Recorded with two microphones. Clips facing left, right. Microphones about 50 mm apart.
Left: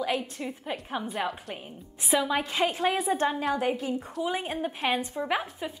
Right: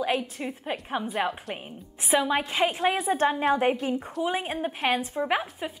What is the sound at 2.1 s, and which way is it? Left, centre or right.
A woman's voice, centre.